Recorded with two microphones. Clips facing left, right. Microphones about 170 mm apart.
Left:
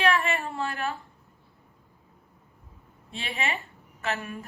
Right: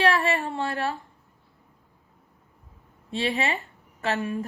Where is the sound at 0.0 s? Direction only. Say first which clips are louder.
Right 3 dB; 35° right (ahead or behind).